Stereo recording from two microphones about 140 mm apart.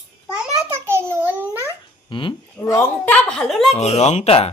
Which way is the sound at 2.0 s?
35° left (ahead or behind).